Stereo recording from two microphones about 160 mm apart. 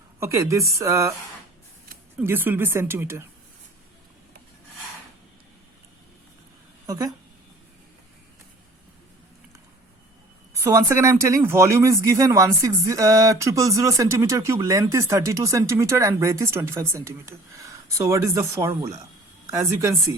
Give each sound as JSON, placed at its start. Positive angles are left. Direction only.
{"t": 0.2, "sound": "speech", "side_deg": -20}
{"t": 2.1, "sound": "speech", "side_deg": -15}
{"t": 6.8, "sound": "speech", "side_deg": -20}
{"t": 10.5, "sound": "speech", "side_deg": -20}